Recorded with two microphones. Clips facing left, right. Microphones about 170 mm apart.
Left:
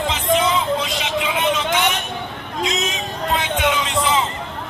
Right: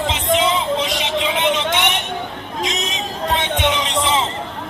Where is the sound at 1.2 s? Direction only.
25° right (ahead or behind).